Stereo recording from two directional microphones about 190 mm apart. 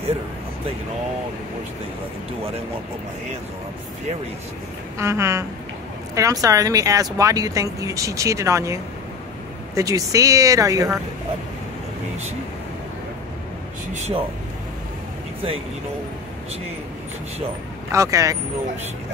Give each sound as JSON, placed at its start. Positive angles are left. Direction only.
{"t": 4.9, "sound": "speech", "side_deg": -15}
{"t": 9.8, "sound": "speech", "side_deg": -20}
{"t": 13.9, "sound": "speech", "side_deg": -35}
{"t": 17.9, "sound": "speech", "side_deg": -15}